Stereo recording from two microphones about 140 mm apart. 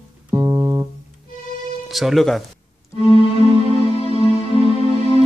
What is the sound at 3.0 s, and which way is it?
Music, 45° left (ahead or behind).